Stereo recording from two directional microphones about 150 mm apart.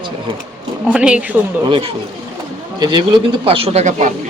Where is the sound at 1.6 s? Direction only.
35° right (ahead or behind); by 4.1 s 50° right (ahead or behind).